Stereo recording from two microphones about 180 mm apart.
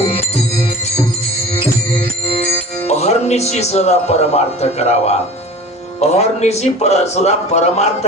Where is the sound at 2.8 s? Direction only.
35° left (ahead or behind).